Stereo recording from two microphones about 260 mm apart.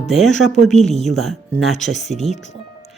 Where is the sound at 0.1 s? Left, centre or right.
Centre.